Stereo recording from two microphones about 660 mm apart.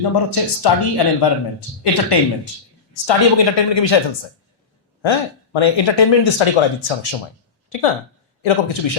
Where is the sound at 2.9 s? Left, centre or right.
Left.